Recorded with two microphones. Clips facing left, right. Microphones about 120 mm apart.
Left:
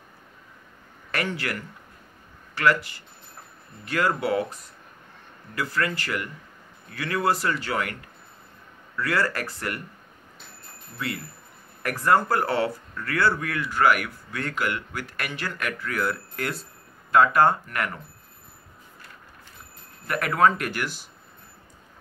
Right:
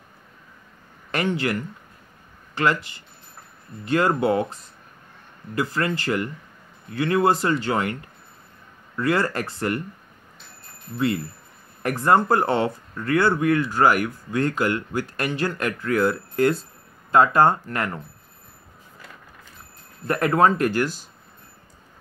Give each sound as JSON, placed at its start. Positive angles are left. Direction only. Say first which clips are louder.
{"t": 1.1, "sound": "speech", "louder": "right 5 dB", "side_deg": -25}
{"t": 11.8, "sound": "speech", "louder": "right 3 dB", "side_deg": -25}
{"t": 20.1, "sound": "speech", "louder": "right 3 dB", "side_deg": -30}